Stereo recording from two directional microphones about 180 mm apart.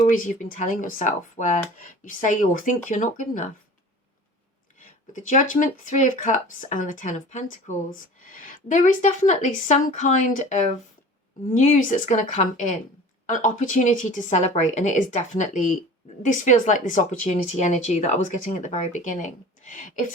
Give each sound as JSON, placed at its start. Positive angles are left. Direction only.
{"t": 0.0, "sound": "speech", "side_deg": 45}
{"t": 5.1, "sound": "speech", "side_deg": 45}